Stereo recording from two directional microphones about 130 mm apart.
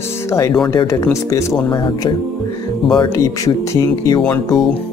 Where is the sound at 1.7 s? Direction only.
35° left (ahead or behind).